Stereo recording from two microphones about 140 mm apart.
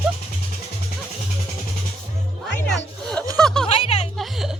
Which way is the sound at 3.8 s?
50° left (ahead or behind).